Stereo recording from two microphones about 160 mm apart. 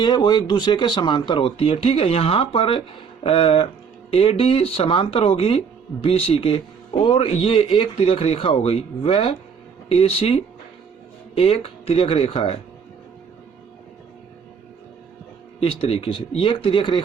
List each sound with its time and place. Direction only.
0.0 s speech: 25° left (ahead or behind)
15.6 s speech: 35° left (ahead or behind)